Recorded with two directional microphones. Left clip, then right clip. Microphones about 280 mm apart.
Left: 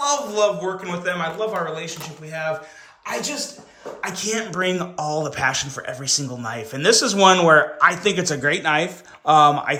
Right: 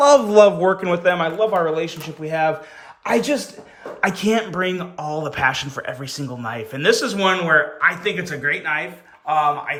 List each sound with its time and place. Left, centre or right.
0.0 s a man's voice: right
3.0 s speech: right
4.0 s speech: centre